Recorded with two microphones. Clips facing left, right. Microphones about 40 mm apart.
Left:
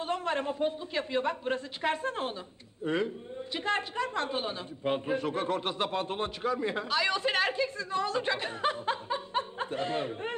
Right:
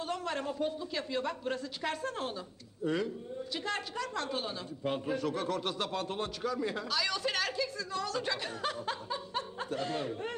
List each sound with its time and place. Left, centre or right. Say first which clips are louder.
0.0 s a man's voice: left 4 dB; left